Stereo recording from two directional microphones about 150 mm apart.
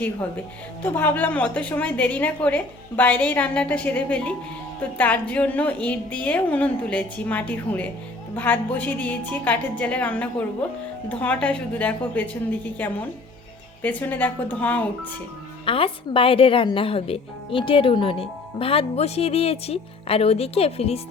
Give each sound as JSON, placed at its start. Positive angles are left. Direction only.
{"t": 0.8, "sound": "a woman's voice", "side_deg": 10}
{"t": 15.6, "sound": "a woman's voice", "side_deg": 35}